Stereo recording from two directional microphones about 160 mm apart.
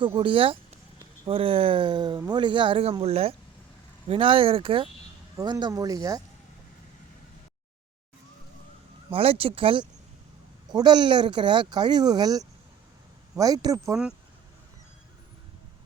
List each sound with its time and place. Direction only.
0.0 s speech: 30° right (ahead or behind)
9.0 s speech: 35° right (ahead or behind)